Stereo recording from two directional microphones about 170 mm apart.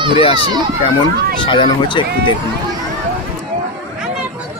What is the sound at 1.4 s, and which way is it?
Speech, 30° left (ahead or behind).